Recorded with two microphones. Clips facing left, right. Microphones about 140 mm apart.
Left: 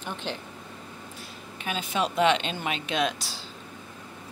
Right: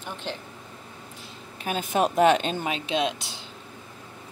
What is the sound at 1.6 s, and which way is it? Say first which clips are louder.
Speech: right 4 dB; 45° right (ahead or behind).